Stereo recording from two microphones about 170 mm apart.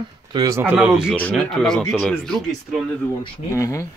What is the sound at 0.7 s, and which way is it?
Speech, 5° right (ahead or behind).